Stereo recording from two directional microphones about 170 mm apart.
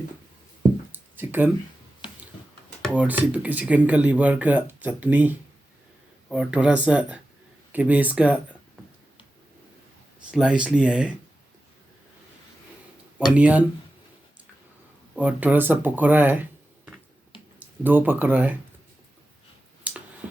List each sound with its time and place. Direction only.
0.9 s a sound: 10° right (ahead or behind)
2.8 s speech: 10° right (ahead or behind)
10.3 s speech: 5° right (ahead or behind)
13.3 s speech: 10° right (ahead or behind)
15.1 s speech: 10° right (ahead or behind)
19.9 s a sound: 10° right (ahead or behind)